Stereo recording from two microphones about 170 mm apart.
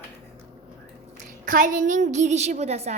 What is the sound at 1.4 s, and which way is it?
A woman's voice, 50° right (ahead or behind).